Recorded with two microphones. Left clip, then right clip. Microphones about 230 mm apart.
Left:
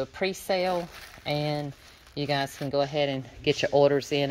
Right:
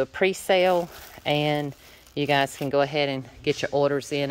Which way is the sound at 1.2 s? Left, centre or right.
Centre.